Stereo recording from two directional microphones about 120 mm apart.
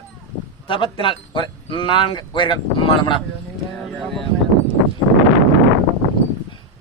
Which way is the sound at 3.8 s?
5° left (ahead or behind).